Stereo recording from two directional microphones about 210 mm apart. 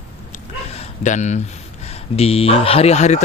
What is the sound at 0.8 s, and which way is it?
Speech, 35° left (ahead or behind).